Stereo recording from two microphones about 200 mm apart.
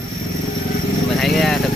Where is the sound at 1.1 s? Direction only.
Centre (ahead or behind).